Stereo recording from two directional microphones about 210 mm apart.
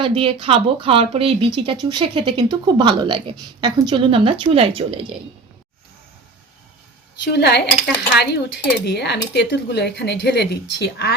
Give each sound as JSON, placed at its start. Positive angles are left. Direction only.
{"t": 0.0, "sound": "speech", "side_deg": -25}
{"t": 7.3, "sound": "speech", "side_deg": 50}